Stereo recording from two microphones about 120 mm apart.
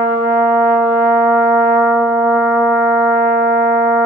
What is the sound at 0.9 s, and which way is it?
Music, 15° right (ahead or behind).